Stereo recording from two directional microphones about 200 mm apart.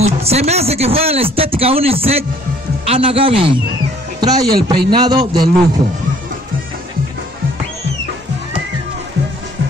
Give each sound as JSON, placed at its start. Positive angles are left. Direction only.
{"t": 0.0, "sound": "speech", "side_deg": -30}